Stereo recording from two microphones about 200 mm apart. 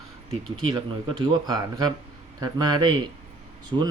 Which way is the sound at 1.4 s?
20° right (ahead or behind).